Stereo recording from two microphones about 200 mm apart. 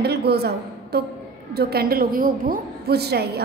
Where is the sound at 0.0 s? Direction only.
55° right (ahead or behind).